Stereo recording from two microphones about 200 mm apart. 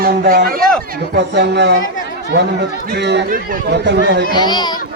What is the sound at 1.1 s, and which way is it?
Speech, 60° right (ahead or behind).